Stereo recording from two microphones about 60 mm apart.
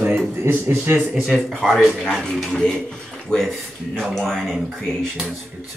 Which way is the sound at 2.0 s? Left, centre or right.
Centre.